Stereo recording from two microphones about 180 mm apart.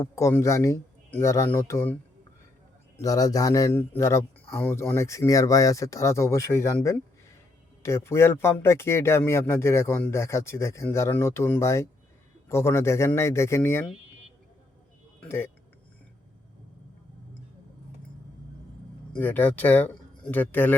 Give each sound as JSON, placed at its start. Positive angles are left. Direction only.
{"t": 0.0, "sound": "speech", "side_deg": 15}
{"t": 3.0, "sound": "a man's voice", "side_deg": 20}
{"t": 15.2, "sound": "speech", "side_deg": 10}
{"t": 19.1, "sound": "speech", "side_deg": 10}